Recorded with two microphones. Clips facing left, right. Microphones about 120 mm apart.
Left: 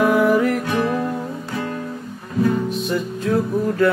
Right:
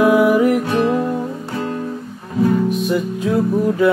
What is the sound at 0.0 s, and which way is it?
Music, 10° right (ahead or behind).